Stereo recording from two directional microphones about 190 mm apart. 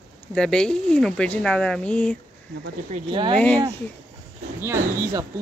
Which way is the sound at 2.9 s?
25° right (ahead or behind).